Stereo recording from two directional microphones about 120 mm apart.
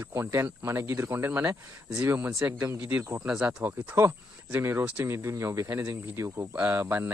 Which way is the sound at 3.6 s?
20° right (ahead or behind).